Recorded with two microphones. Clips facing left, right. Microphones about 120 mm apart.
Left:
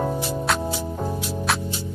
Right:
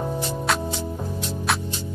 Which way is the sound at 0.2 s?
5° left (ahead or behind).